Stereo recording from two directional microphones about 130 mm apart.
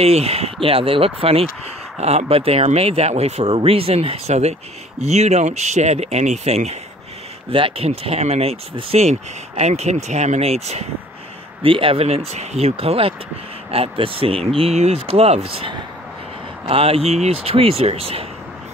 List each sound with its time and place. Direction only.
0.0 s speech: 50° right (ahead or behind)
7.5 s speech: 45° right (ahead or behind)
11.6 s speech: 45° right (ahead or behind)